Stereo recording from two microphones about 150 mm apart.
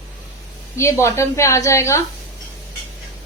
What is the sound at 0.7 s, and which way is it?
A woman's voice, 20° left (ahead or behind).